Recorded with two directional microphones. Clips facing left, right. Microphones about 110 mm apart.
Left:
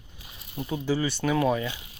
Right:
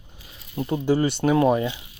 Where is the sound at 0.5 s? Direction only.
40° right (ahead or behind).